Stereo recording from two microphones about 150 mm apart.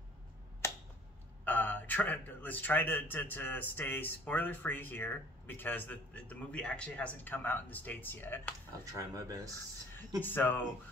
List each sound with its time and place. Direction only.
1.4 s a man's voice: 10° left (ahead or behind)
8.9 s speech: 25° right (ahead or behind)
10.2 s a man's voice: 15° left (ahead or behind)